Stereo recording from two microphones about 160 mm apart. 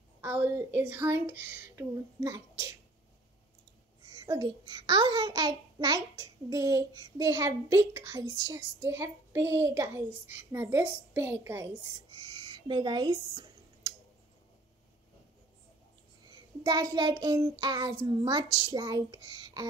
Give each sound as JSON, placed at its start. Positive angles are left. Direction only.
{"t": 0.2, "sound": "speech", "side_deg": -15}
{"t": 4.1, "sound": "a child's voice", "side_deg": -25}
{"t": 16.6, "sound": "a child's voice", "side_deg": -25}